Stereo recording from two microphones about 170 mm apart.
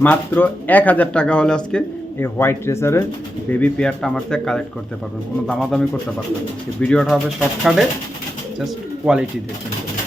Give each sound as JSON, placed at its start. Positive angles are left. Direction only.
{"t": 0.0, "sound": "speech", "side_deg": 10}
{"t": 6.8, "sound": "speech", "side_deg": 5}
{"t": 8.6, "sound": "speech", "side_deg": -5}